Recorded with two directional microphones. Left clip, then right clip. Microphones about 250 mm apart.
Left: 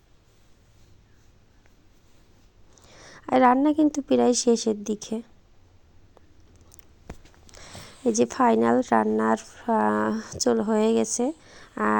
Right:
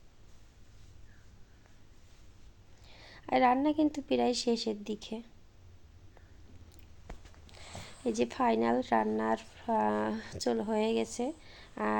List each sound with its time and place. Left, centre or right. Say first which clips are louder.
2.8 s a woman's voice: left 8 dB; left
7.1 s a sound: left 6 dB; left
9.1 s speech: left 8 dB; left